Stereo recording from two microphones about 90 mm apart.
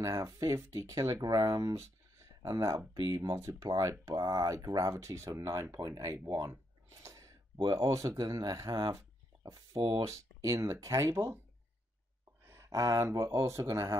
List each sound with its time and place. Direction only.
0.0 s speech: 35° right (ahead or behind)
6.1 s a sound: 35° right (ahead or behind)
7.7 s speech: 40° right (ahead or behind)
9.7 s speech: 65° right (ahead or behind)
9.9 s speech: 35° right (ahead or behind)
12.4 s speech: 35° right (ahead or behind)